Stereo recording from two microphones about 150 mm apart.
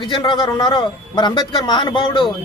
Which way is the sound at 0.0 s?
35° left (ahead or behind).